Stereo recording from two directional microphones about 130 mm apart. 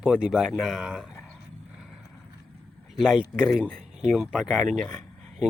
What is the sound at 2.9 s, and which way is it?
Speech, centre (ahead or behind).